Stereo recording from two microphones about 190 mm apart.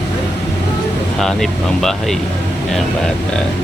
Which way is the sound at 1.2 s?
Centre (ahead or behind).